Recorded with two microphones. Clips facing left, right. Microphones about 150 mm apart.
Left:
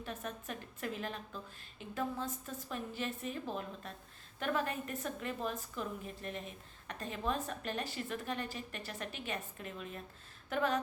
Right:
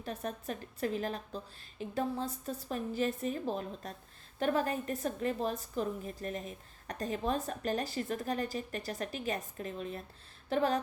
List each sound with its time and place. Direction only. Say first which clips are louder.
0.0 s a woman's voice: right 4 dB; 35° right (ahead or behind)